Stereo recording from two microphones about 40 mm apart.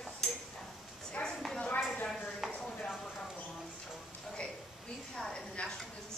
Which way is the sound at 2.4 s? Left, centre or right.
Centre.